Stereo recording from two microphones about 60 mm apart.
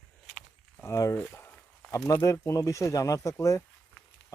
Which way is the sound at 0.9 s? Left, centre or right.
Left.